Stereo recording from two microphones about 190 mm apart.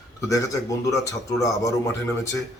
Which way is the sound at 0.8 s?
15° left (ahead or behind).